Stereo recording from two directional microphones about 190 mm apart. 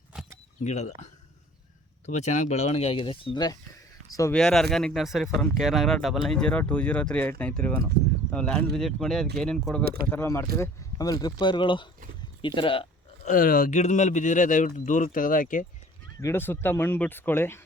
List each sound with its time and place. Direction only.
0.6 s speech: 35° left (ahead or behind)
2.0 s speech: 35° left (ahead or behind); by 4.4 s 15° left (ahead or behind)
4.4 s speech: centre (ahead or behind)
9.8 s speech: 55° right (ahead or behind)
10.1 s speech: 15° left (ahead or behind)
13.2 s speech: 50° left (ahead or behind)
16.2 s speech: 10° left (ahead or behind)